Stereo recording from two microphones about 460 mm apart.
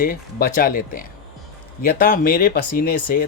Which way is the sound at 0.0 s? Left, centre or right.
Centre.